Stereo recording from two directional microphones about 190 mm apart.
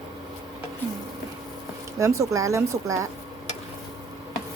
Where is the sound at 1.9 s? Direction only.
15° right (ahead or behind).